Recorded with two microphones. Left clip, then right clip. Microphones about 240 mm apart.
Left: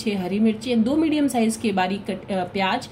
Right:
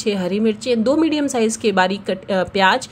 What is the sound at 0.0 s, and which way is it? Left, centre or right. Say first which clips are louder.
Speech: right 5 dB; right.